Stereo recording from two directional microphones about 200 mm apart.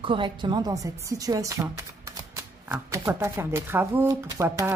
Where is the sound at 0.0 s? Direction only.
25° right (ahead or behind).